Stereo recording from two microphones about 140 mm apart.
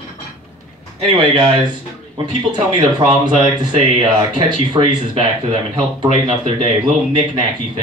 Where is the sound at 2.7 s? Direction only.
30° right (ahead or behind).